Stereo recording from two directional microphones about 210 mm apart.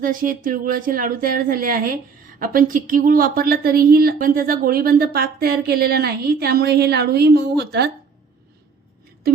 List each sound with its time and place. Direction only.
0.0 s a woman's voice: 40° right (ahead or behind)